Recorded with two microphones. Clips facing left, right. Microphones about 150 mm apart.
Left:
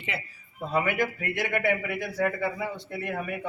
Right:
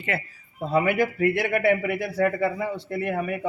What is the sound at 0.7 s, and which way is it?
Speech, 35° right (ahead or behind).